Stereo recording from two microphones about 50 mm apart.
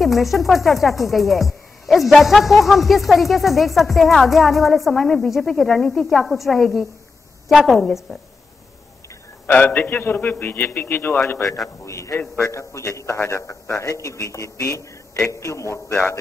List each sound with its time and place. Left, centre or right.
0.0 s speech: centre
9.5 s a man's voice: left
11.4 s speech: centre
11.8 s a man's voice: left
15.4 s a man's voice: left